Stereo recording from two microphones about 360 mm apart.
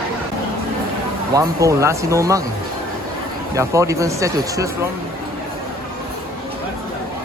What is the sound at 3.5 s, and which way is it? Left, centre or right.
Speech, centre.